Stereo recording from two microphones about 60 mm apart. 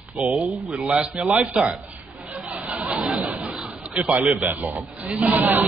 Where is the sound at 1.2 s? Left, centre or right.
Right.